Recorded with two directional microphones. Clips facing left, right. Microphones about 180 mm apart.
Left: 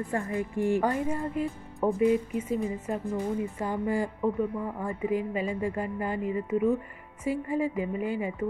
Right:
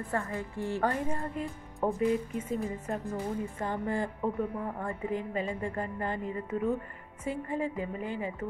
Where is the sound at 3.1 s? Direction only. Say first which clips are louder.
Left 6 dB; 10° left (ahead or behind).